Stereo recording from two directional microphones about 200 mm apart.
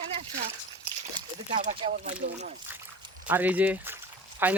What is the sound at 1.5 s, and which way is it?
Speech, 35° right (ahead or behind).